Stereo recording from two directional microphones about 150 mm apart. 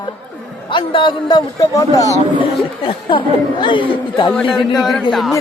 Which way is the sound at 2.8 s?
35° left (ahead or behind).